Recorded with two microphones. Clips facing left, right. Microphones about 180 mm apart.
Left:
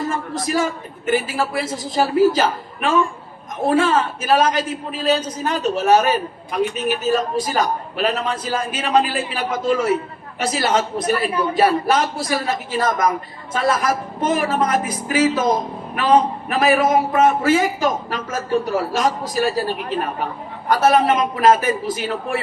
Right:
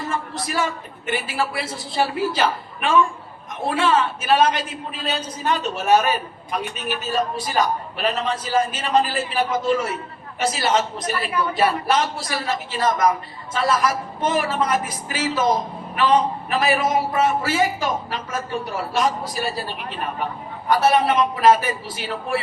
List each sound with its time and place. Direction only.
0.1 s a man's voice: 45° left (ahead or behind)
10.4 s a man's voice: 55° left (ahead or behind)